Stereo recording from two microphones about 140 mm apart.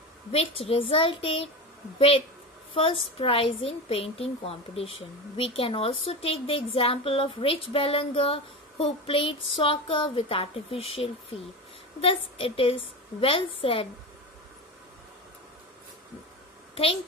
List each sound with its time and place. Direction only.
0.3 s a woman's voice: 45° left (ahead or behind)